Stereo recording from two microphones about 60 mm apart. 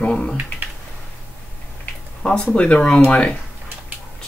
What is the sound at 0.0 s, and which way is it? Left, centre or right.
Speech, left.